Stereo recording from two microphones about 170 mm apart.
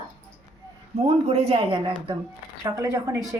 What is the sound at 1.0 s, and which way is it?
Speech, 35° right (ahead or behind).